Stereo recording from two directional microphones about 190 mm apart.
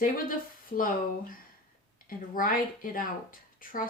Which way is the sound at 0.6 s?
45° left (ahead or behind).